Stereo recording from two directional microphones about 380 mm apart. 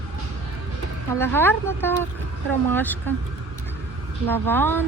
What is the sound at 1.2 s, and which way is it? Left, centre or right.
Speech, centre.